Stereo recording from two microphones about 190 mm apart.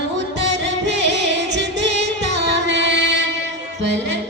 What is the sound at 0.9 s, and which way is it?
Music, 65° right (ahead or behind).